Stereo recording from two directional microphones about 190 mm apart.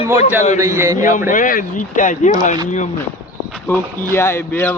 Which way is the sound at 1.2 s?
45° left (ahead or behind).